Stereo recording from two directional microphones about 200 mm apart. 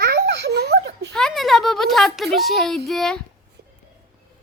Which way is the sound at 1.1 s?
Centre (ahead or behind).